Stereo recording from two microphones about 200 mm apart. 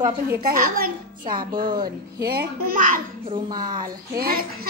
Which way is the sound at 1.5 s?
20° right (ahead or behind).